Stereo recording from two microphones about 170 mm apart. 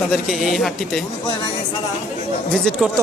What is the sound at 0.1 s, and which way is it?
Speech, centre (ahead or behind).